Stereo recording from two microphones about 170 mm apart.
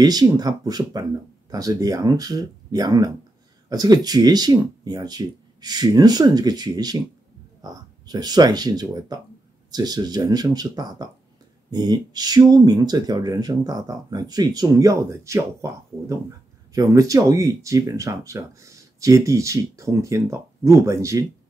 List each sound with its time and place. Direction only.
0.0 s speech: 25° right (ahead or behind)